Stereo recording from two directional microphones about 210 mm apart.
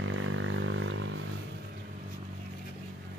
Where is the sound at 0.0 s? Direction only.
70° right (ahead or behind).